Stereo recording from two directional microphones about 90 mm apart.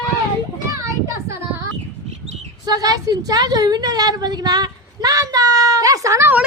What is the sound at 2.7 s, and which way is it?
A woman's voice, 45° right (ahead or behind).